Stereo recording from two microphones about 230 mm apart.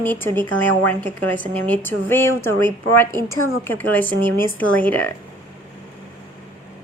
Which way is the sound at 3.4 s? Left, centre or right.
Left.